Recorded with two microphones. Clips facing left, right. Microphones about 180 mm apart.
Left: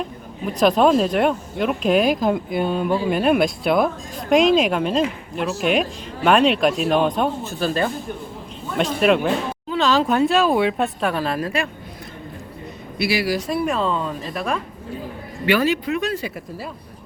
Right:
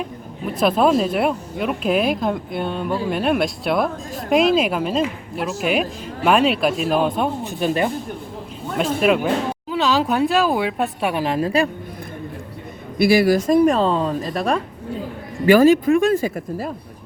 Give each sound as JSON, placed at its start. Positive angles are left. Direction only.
{"t": 0.6, "sound": "speech", "side_deg": -5}
{"t": 7.4, "sound": "speech", "side_deg": -15}
{"t": 8.8, "sound": "speech", "side_deg": -5}
{"t": 11.1, "sound": "a woman's voice", "side_deg": -15}
{"t": 13.0, "sound": "speech", "side_deg": -50}